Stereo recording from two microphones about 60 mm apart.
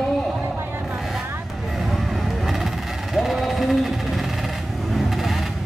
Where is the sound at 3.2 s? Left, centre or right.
Centre.